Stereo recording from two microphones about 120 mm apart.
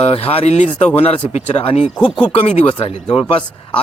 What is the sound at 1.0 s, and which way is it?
Speech, 60° left (ahead or behind).